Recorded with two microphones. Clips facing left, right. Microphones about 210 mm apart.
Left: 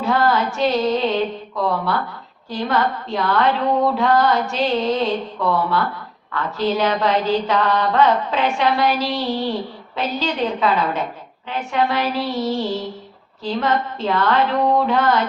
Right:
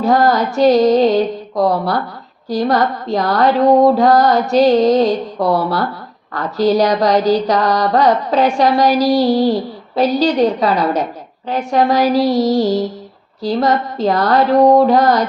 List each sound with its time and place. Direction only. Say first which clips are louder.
0.0 s mantra: right 5 dB; 40° right (ahead or behind)